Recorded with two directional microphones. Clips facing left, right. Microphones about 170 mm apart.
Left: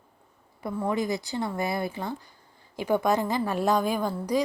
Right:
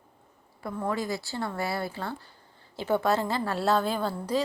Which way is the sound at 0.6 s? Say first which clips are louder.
Left 3 dB; 15° left (ahead or behind).